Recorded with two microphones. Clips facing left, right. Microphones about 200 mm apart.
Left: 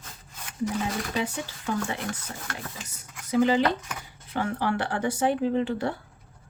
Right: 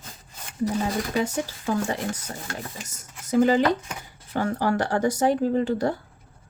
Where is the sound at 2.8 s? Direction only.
45° right (ahead or behind).